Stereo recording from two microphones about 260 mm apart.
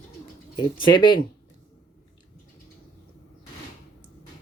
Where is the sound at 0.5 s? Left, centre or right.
Centre.